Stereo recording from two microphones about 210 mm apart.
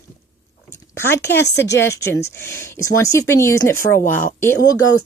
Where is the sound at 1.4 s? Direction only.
55° left (ahead or behind).